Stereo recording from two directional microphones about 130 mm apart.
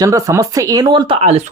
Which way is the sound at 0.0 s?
25° right (ahead or behind).